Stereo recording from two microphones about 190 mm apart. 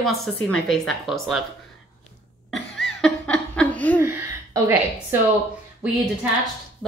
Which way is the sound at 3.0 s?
5° left (ahead or behind).